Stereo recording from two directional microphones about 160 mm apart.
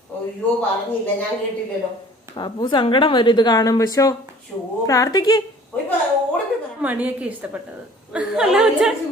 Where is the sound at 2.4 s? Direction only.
25° left (ahead or behind).